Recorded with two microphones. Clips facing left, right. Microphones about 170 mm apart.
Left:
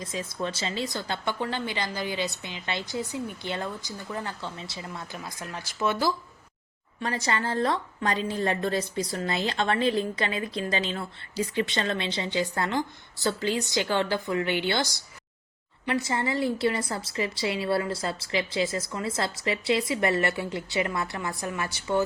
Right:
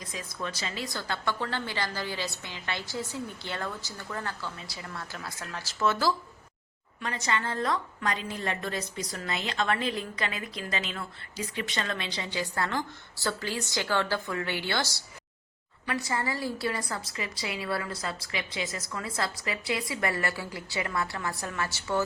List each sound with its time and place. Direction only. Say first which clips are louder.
0.0 s a woman's voice: left 5 dB; 25° left (ahead or behind)
7.0 s a woman's voice: left 3 dB; 35° left (ahead or behind); by 15.0 s 15° left (ahead or behind)
16.0 s a woman's voice: left 4 dB; 25° left (ahead or behind)